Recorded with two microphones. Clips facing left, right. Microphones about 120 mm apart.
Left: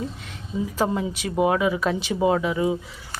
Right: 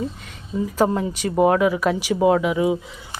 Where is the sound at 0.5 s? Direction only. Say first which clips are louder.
Right 4 dB; centre (ahead or behind).